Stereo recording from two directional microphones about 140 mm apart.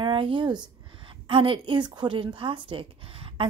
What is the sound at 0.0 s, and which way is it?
A woman's voice, 35° right (ahead or behind).